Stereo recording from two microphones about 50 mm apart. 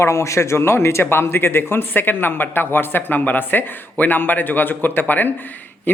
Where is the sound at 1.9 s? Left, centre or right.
Left.